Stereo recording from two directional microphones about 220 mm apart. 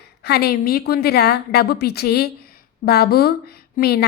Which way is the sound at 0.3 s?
45° left (ahead or behind).